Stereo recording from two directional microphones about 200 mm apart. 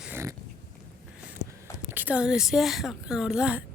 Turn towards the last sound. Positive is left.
turn(degrees=-5)  # may be behind; listen again after turning